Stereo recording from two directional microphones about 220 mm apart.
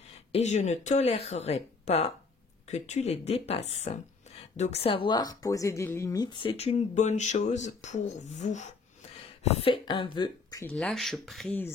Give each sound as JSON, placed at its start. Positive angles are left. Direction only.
{"t": 0.3, "sound": "a woman's voice", "side_deg": 30}